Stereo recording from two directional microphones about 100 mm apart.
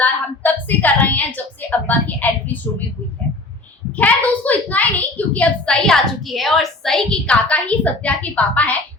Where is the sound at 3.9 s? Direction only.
15° left (ahead or behind).